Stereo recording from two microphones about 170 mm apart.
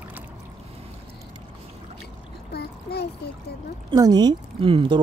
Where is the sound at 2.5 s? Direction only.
75° left (ahead or behind).